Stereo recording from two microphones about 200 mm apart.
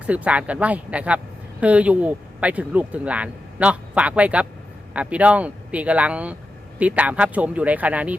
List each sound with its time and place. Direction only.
0.0 s speech: 5° right (ahead or behind)